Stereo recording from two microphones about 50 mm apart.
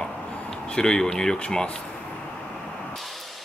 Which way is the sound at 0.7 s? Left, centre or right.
Centre.